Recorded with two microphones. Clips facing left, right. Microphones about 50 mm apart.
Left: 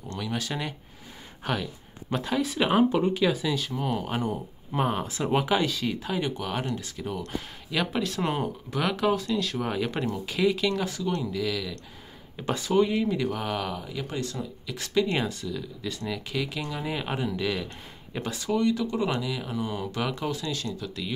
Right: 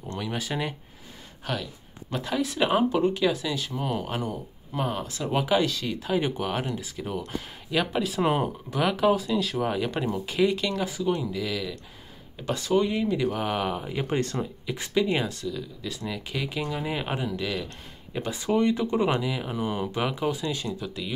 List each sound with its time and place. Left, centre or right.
0.1 s speech: centre
1.4 s speech: centre
4.7 s speech: centre
5.4 s speech: centre
6.0 s speech: centre
12.4 s speech: centre
15.0 s speech: centre
18.3 s speech: right